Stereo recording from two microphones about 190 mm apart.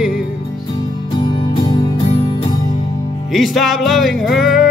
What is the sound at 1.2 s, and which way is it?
Music, 25° left (ahead or behind).